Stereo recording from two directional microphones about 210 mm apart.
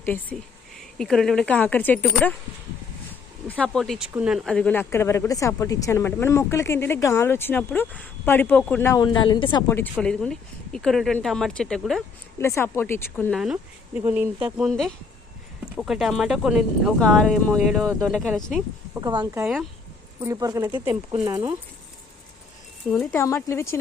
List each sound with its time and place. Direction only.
0.0 s speech: 10° left (ahead or behind)
3.4 s speech: 5° left (ahead or behind)
12.4 s speech: 10° left (ahead or behind)
13.4 s speech: 5° right (ahead or behind)
18.9 s speech: 20° right (ahead or behind)
22.9 s speech: 5° left (ahead or behind)